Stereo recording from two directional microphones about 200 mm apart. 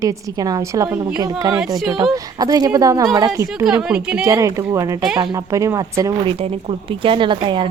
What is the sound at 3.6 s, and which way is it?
A woman's voice, 5° right (ahead or behind).